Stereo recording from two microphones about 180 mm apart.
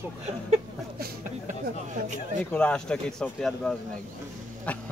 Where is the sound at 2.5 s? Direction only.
5° left (ahead or behind).